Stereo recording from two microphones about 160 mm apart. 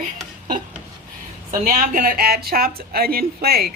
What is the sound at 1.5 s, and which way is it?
Speech, 55° right (ahead or behind).